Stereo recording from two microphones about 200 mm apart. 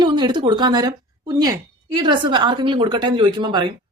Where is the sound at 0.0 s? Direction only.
25° right (ahead or behind).